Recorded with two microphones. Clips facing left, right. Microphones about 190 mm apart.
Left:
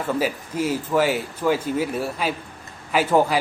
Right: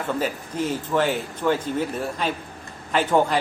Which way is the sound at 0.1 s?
10° left (ahead or behind).